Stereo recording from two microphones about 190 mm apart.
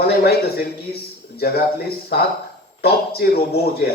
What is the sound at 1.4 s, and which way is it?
Speech, 55° left (ahead or behind).